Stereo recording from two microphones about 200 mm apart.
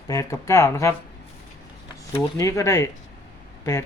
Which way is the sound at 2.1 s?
15° left (ahead or behind).